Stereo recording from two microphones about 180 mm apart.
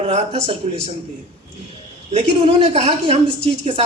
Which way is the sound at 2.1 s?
40° right (ahead or behind).